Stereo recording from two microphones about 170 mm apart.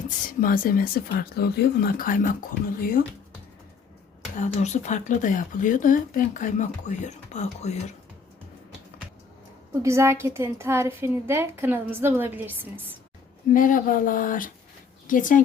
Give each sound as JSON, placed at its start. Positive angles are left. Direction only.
{"t": 0.4, "sound": "speech", "side_deg": 55}
{"t": 4.4, "sound": "speech", "side_deg": 45}
{"t": 9.8, "sound": "a woman's voice", "side_deg": -15}
{"t": 13.5, "sound": "speech", "side_deg": 50}